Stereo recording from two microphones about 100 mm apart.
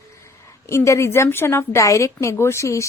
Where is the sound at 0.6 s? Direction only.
30° left (ahead or behind).